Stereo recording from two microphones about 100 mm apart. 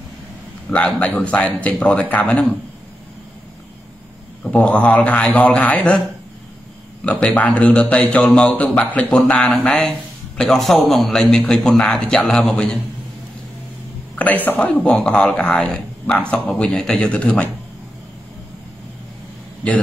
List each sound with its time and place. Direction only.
0.8 s a man's voice: 10° left (ahead or behind)
4.5 s a man's voice: 15° left (ahead or behind)
7.1 s a man's voice: 10° left (ahead or behind)
14.1 s a man's voice: 15° left (ahead or behind)
14.8 s a man's voice: 5° left (ahead or behind)